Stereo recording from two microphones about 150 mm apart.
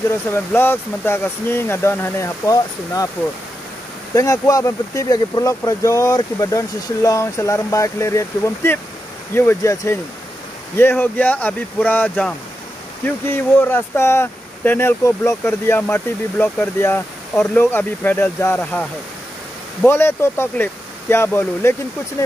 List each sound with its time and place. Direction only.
0.3 s speech: 15° left (ahead or behind)
4.1 s speech: 20° left (ahead or behind)